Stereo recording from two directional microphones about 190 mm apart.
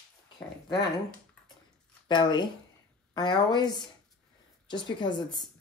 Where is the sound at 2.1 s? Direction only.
25° left (ahead or behind).